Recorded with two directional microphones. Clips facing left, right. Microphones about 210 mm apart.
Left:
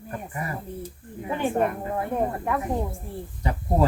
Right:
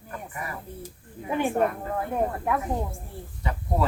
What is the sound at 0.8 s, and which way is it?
Speech, 10° right (ahead or behind).